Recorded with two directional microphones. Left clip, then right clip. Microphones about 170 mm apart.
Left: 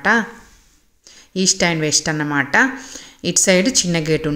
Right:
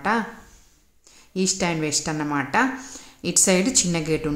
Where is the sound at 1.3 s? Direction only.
20° left (ahead or behind).